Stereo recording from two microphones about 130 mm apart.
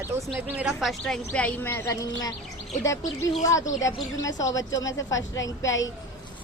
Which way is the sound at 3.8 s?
25° left (ahead or behind).